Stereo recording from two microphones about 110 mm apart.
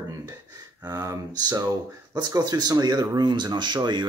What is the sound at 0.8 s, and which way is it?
Speech, 35° right (ahead or behind).